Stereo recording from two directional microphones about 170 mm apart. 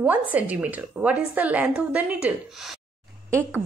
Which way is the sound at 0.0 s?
10° right (ahead or behind).